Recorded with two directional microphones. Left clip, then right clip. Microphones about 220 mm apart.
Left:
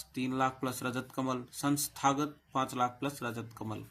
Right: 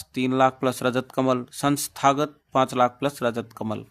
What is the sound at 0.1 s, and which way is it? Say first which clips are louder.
Speech: right 12 dB; 50° right (ahead or behind).